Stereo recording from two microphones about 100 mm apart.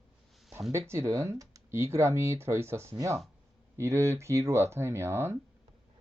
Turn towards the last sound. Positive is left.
turn(degrees=-25)  # may be behind; listen again after turning